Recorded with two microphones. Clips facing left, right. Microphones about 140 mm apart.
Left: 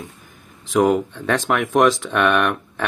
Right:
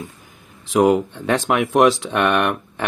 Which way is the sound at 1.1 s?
15° right (ahead or behind).